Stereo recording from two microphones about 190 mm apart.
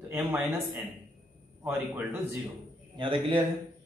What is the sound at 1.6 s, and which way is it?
Speech, 10° right (ahead or behind).